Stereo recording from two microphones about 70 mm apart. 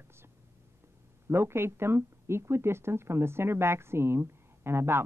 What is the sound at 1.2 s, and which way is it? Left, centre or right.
Speech, right.